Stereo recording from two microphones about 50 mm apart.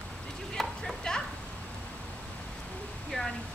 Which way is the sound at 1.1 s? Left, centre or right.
Centre.